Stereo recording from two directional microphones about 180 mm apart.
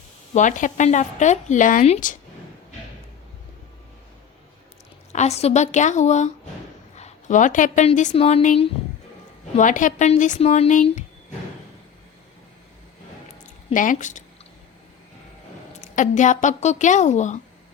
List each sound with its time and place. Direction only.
0.3 s a woman's voice: 45° left (ahead or behind)
5.1 s a woman's voice: 35° left (ahead or behind)
9.6 s a woman's voice: 45° left (ahead or behind)
13.4 s a sound: 45° left (ahead or behind)
15.8 s a woman's voice: 45° left (ahead or behind)